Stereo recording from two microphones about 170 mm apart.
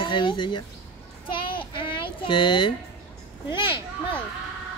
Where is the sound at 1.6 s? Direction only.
30° left (ahead or behind).